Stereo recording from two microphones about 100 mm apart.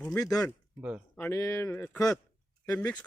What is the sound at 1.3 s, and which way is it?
Speech, 30° left (ahead or behind).